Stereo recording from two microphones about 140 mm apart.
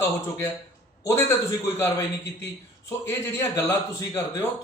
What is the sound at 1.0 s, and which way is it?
A man's voice, 20° left (ahead or behind).